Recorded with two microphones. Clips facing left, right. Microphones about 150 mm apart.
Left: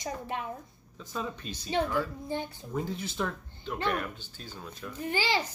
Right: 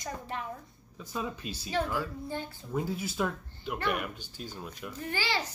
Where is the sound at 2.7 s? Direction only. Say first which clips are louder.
Right 1 dB; 10° right (ahead or behind).